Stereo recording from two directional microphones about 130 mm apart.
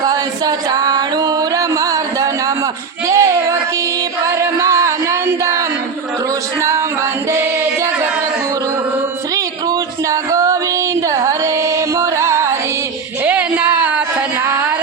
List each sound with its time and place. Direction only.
0.0 s music: 30° right (ahead or behind)
3.1 s child singing: 25° right (ahead or behind)
4.3 s music: 20° right (ahead or behind)
6.6 s a sound: 20° right (ahead or behind)
9.3 s music: 25° right (ahead or behind)
11.1 s carnatic music: 25° right (ahead or behind)
13.2 s a sound: 10° right (ahead or behind)